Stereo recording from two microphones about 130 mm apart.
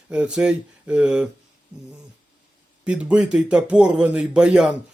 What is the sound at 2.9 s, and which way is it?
Speech, 10° right (ahead or behind).